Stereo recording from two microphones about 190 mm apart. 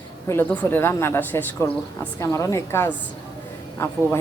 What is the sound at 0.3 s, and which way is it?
Speech, 10° left (ahead or behind).